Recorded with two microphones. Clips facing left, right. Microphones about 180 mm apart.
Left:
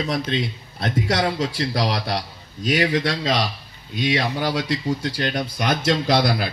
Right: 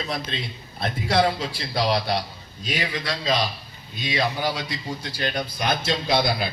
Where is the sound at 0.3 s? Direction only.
85° left.